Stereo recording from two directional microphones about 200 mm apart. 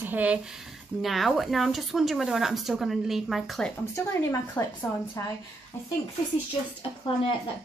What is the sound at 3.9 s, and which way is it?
Speech, 15° left (ahead or behind).